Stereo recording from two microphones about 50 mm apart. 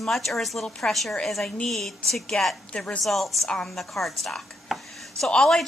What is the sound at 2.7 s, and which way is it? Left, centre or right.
Speech, left.